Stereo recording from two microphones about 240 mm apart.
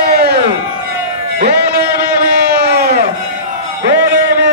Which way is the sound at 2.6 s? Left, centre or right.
Right.